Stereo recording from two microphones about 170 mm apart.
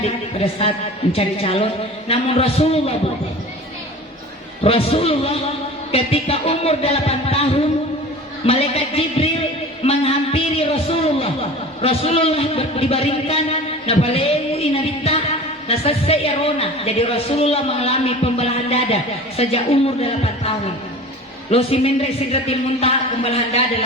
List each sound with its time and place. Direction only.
0.0 s a man's voice: 35° left (ahead or behind)
4.6 s a man's voice: 35° left (ahead or behind)
9.8 s a sound: 35° left (ahead or behind)
15.6 s a woman's voice: 35° left (ahead or behind)
21.5 s a man's voice: 35° left (ahead or behind)